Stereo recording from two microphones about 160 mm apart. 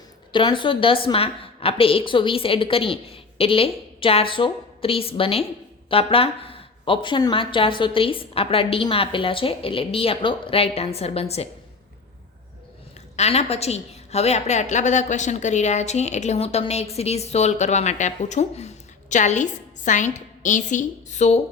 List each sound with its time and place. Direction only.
0.3 s a woman's voice: 30° left (ahead or behind)
13.1 s a woman's voice: 40° left (ahead or behind)